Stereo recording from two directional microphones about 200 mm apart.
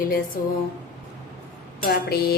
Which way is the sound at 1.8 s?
45° left (ahead or behind).